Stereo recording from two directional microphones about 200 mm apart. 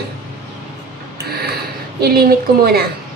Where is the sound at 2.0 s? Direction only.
50° right (ahead or behind).